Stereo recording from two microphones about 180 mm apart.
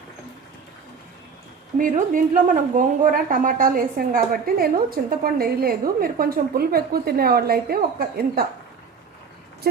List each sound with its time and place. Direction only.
1.8 s a woman's voice: 45° right (ahead or behind)